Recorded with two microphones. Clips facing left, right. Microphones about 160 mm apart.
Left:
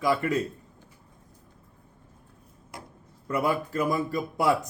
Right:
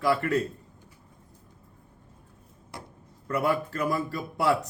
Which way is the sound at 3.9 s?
15° left (ahead or behind).